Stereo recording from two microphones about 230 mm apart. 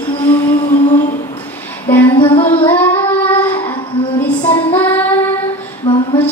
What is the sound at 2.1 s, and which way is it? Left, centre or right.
Music, centre.